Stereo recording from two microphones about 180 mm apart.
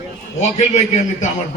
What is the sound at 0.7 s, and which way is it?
Speech, 40° left (ahead or behind).